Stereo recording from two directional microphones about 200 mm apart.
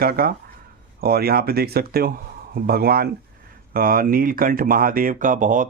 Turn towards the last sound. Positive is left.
turn(degrees=-40)  # may be behind; listen again after turning